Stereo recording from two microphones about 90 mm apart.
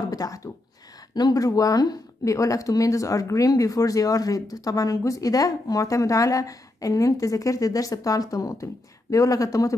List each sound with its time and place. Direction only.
0.1 s speech: 40° left (ahead or behind)